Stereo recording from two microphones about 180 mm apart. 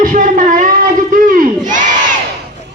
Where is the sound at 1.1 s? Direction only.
50° right (ahead or behind).